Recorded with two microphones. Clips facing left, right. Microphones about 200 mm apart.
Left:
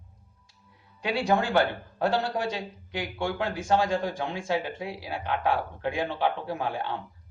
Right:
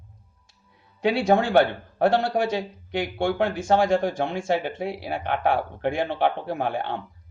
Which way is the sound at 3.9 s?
75° right (ahead or behind).